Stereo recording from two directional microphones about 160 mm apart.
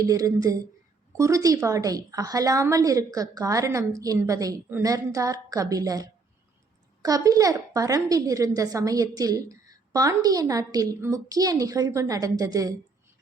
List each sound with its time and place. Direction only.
0.0 s a woman's voice: 20° right (ahead or behind)